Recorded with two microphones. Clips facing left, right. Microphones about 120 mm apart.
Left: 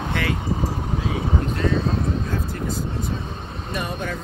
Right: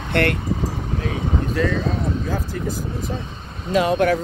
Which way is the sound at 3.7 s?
90° right.